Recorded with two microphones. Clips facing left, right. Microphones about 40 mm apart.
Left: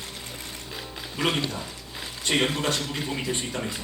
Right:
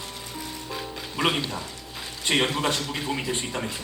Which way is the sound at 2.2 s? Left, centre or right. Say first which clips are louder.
Right 1 dB; centre.